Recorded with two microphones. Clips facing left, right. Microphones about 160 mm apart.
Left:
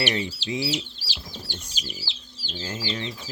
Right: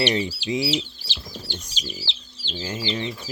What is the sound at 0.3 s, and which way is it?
Speech, 15° right (ahead or behind).